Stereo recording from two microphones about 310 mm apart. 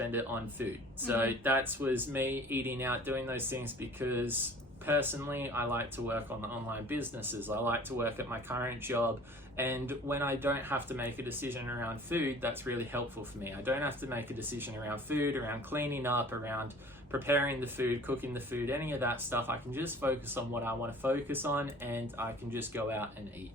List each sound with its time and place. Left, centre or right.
0.0 s speech: centre